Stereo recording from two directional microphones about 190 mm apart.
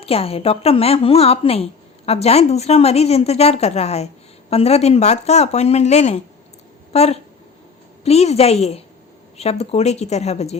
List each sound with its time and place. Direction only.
0.0 s a woman's voice: 30° left (ahead or behind)